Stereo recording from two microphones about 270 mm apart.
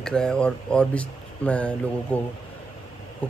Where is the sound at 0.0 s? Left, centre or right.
Centre.